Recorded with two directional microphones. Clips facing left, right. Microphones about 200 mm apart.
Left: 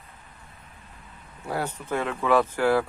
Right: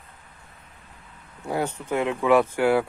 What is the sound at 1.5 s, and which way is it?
Speech, 15° right (ahead or behind).